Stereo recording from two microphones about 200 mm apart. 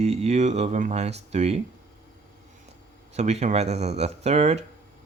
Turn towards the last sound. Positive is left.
turn(degrees=-35)  # may be behind; listen again after turning